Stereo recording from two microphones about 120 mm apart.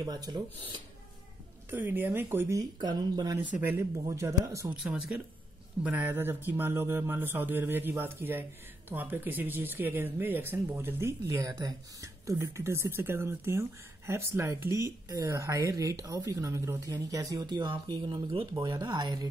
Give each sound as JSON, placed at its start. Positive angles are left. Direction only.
{"t": 0.0, "sound": "speech", "side_deg": -35}
{"t": 1.7, "sound": "speech", "side_deg": -15}
{"t": 2.6, "sound": "speech", "side_deg": -35}
{"t": 4.8, "sound": "speech", "side_deg": -10}